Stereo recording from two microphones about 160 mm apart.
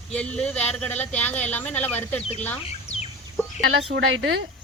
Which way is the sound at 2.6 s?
40° left (ahead or behind).